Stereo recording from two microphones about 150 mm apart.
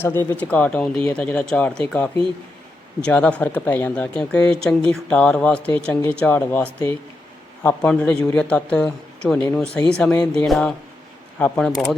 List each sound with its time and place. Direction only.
0.0 s speech: 15° left (ahead or behind)